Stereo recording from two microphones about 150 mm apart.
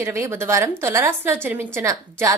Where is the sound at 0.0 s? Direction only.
15° right (ahead or behind).